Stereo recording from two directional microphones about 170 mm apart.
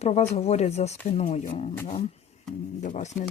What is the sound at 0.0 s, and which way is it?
Speech, 40° left (ahead or behind).